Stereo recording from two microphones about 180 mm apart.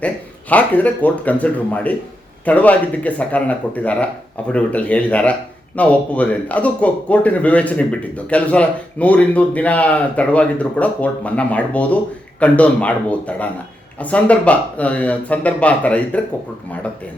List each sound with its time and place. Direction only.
0.5 s speech: 10° left (ahead or behind)